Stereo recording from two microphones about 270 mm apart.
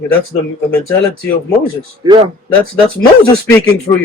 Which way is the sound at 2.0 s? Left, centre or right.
Centre.